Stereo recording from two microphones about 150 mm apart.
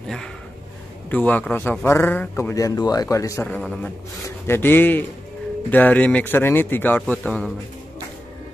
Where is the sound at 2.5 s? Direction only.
20° left (ahead or behind).